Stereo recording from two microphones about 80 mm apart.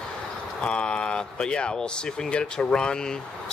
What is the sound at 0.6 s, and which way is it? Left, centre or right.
Speech, centre.